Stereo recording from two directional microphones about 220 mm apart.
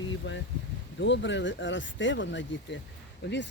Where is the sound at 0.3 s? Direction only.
55° left (ahead or behind).